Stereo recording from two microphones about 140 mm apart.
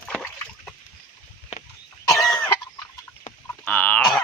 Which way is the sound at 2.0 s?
25° left (ahead or behind).